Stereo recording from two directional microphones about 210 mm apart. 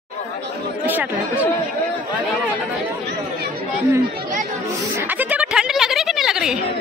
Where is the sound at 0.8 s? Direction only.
10° right (ahead or behind).